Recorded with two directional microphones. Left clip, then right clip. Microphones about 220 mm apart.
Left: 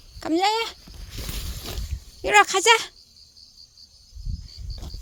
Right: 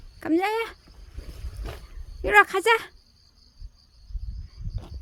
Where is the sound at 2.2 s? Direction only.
5° right (ahead or behind).